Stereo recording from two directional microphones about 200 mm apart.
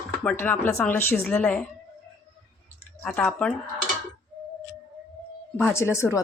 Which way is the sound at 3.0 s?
5° left (ahead or behind).